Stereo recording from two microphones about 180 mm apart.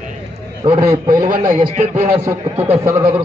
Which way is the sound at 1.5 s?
45° right (ahead or behind).